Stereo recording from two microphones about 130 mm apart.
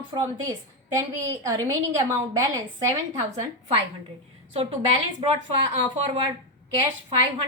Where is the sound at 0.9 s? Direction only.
25° right (ahead or behind).